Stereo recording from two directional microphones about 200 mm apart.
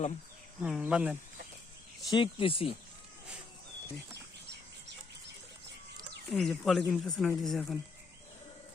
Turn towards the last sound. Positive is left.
turn(degrees=0)  # may be behind; listen again after turning